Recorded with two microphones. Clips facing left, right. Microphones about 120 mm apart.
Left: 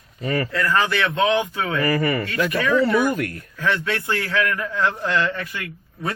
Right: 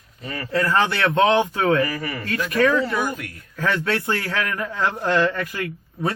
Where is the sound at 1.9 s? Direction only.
85° left.